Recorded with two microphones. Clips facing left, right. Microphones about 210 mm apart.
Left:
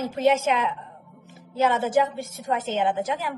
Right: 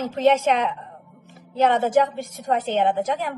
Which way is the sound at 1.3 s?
50° right (ahead or behind).